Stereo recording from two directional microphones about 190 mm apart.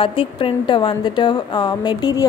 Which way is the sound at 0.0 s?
30° left (ahead or behind).